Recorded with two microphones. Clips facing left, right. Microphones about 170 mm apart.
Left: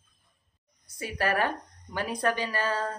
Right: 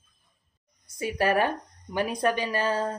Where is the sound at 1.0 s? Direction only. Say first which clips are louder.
Right 4 dB; 20° right (ahead or behind).